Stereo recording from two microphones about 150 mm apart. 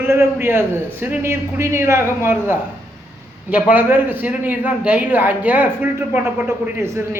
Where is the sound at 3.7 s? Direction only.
15° right (ahead or behind).